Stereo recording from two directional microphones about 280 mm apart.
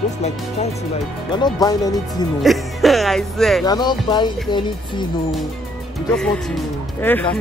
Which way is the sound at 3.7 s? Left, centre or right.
Centre.